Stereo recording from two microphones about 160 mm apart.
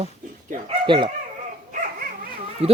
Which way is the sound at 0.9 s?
30° right (ahead or behind).